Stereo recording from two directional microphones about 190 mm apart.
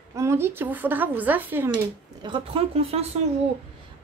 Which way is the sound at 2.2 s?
25° right (ahead or behind).